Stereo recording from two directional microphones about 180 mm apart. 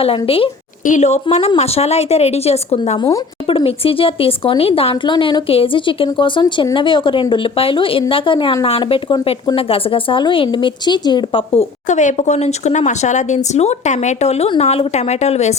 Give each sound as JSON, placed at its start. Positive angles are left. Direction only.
{"t": 0.3, "sound": "a woman's voice", "side_deg": 30}